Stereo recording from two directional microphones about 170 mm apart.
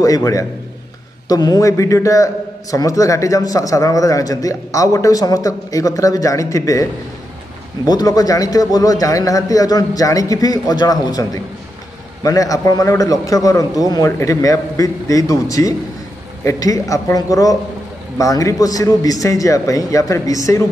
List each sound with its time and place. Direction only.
0.0 s a man's voice: 20° left (ahead or behind)